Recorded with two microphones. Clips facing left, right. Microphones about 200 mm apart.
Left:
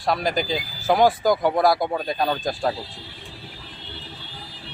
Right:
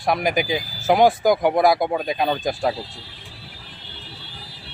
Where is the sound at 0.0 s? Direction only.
15° right (ahead or behind).